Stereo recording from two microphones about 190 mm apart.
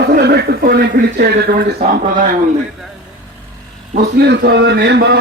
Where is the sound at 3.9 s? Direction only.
60° right (ahead or behind).